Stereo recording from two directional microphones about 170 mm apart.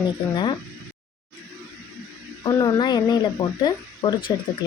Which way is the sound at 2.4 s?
20° left (ahead or behind).